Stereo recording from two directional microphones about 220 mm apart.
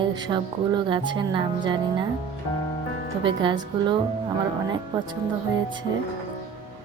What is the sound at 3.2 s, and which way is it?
Speech, 20° right (ahead or behind).